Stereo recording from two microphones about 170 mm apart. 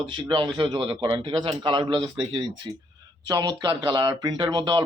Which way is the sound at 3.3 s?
25° right (ahead or behind).